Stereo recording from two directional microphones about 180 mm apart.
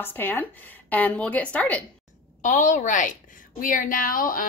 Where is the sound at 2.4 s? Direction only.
45° left (ahead or behind).